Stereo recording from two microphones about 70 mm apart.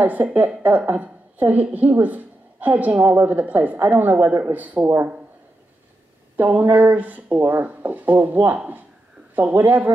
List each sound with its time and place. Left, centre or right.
0.0 s a woman's voice: right
6.3 s a woman's voice: right